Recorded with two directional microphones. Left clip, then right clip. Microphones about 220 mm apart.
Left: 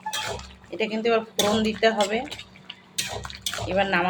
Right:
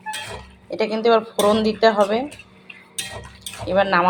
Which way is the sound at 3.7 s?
20° right (ahead or behind).